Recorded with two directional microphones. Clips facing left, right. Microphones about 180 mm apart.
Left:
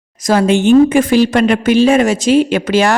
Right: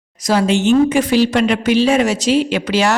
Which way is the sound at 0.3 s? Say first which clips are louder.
Left 4 dB; 50° left (ahead or behind).